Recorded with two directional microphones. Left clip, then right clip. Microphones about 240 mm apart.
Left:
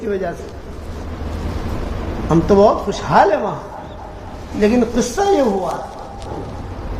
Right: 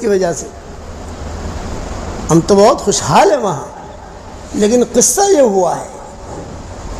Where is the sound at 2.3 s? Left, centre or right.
Right.